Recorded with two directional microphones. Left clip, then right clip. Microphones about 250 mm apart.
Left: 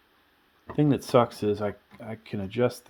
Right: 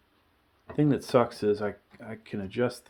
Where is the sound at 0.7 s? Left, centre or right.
Left.